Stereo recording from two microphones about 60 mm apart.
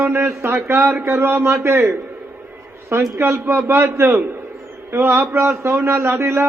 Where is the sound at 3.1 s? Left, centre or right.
Right.